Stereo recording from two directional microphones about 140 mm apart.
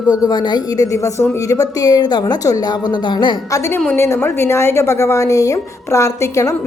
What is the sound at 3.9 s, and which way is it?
A woman's voice, 20° left (ahead or behind).